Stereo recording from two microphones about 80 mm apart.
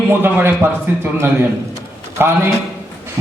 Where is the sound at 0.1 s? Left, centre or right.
Right.